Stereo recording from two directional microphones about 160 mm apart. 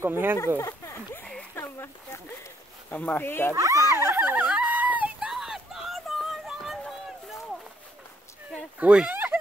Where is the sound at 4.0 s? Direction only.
15° right (ahead or behind).